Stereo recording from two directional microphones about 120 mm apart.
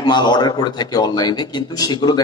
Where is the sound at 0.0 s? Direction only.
35° left (ahead or behind).